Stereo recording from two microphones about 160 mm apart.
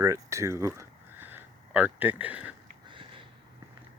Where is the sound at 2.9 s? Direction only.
30° right (ahead or behind).